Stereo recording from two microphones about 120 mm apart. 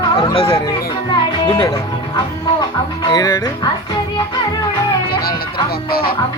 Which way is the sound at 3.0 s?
35° left (ahead or behind).